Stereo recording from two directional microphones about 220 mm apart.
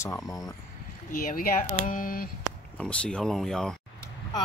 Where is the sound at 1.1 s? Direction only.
40° left (ahead or behind).